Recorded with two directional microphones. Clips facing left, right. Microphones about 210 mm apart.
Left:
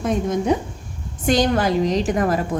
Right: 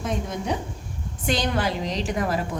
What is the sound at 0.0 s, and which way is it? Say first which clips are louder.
A woman's voice: left 8 dB; 50° left (ahead or behind).